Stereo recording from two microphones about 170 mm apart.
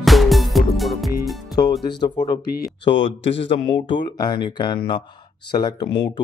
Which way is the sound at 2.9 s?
90° left.